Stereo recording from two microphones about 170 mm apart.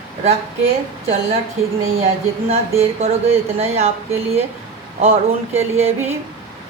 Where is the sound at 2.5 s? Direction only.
40° right (ahead or behind).